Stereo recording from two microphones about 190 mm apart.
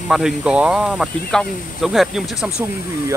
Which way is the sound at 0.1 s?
5° right (ahead or behind).